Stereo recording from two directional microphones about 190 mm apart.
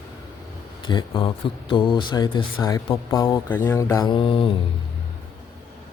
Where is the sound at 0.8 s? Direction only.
25° left (ahead or behind).